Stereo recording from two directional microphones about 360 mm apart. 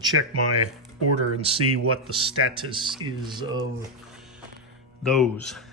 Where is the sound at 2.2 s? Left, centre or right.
Centre.